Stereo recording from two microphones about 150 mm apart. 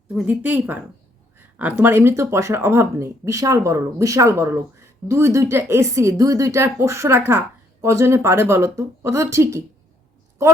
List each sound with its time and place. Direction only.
0.1 s speech: 10° right (ahead or behind)